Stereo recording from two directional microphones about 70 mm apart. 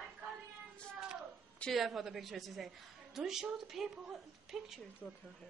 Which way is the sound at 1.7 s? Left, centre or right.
Centre.